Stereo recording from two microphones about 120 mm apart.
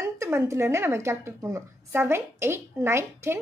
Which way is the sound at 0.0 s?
20° right (ahead or behind).